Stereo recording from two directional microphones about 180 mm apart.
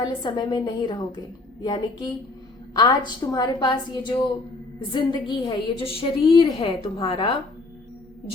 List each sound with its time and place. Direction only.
0.0 s a woman's voice: 25° left (ahead or behind)
5.3 s a woman's voice: 30° left (ahead or behind)